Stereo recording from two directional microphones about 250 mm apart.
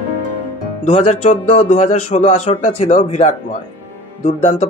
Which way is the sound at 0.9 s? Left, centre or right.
Left.